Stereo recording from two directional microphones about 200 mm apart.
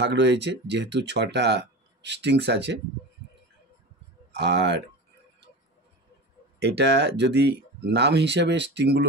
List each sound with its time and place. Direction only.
0.0 s speech: 60° right (ahead or behind)
4.3 s speech: 60° right (ahead or behind)
6.6 s speech: 60° right (ahead or behind)